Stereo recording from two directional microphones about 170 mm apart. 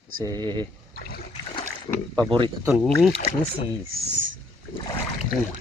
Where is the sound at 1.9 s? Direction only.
20° left (ahead or behind).